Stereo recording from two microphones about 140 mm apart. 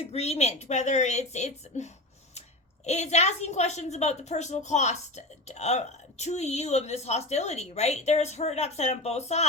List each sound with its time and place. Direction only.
0.1 s a woman's voice: 50° left (ahead or behind)